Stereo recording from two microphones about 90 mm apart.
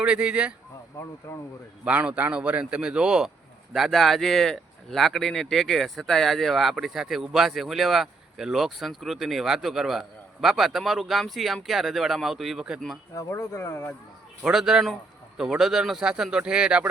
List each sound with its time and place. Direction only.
0.0 s speech: 15° right (ahead or behind)
0.9 s speech: 40° left (ahead or behind)
1.8 s a man's voice: 15° right (ahead or behind)
13.1 s speech: 30° left (ahead or behind)
14.4 s a man's voice: 5° right (ahead or behind)